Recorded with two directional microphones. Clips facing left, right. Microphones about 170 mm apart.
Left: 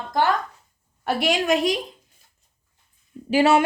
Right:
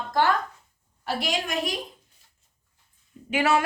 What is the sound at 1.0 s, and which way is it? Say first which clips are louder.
Speech: left 7 dB; 75° left (ahead or behind).